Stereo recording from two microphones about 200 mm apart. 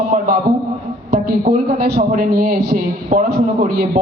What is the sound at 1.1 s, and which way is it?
A man's voice, 50° right (ahead or behind).